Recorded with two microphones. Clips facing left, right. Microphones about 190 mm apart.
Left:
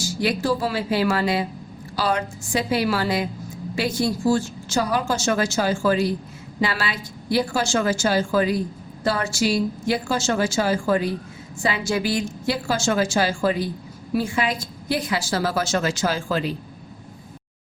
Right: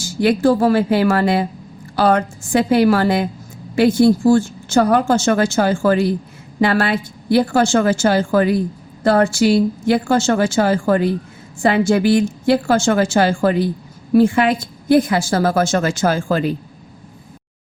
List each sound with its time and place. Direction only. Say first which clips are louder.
0.0 s a woman's voice: right 8 dB; 55° right (ahead or behind)